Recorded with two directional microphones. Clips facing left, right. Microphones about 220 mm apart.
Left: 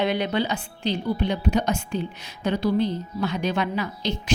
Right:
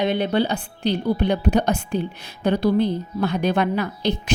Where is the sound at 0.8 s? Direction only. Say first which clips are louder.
Right 4 dB; 60° right (ahead or behind).